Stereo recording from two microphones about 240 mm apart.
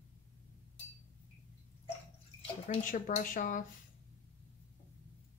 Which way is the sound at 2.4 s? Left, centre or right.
Left.